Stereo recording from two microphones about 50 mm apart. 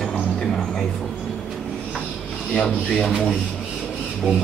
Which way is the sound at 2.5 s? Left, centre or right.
Left.